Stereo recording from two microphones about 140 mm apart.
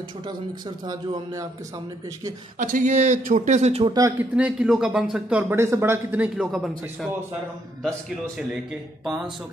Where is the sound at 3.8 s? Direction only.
30° right (ahead or behind).